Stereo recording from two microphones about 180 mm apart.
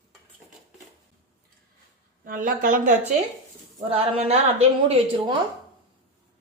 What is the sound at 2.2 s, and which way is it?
Speech, 50° right (ahead or behind).